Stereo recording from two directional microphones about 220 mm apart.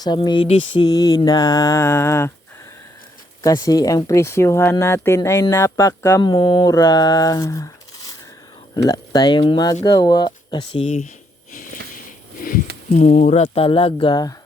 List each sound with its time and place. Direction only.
0.0 s speech: 20° left (ahead or behind)
3.4 s speech: 15° left (ahead or behind)
8.9 s speech: 20° left (ahead or behind)
12.4 s a sound: 40° left (ahead or behind)
12.9 s speech: 35° left (ahead or behind); by 14.3 s 20° left (ahead or behind)